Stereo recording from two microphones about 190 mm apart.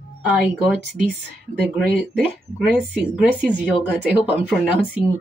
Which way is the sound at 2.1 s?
5° right (ahead or behind).